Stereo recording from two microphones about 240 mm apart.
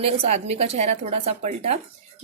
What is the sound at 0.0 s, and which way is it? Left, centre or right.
A woman's voice, right.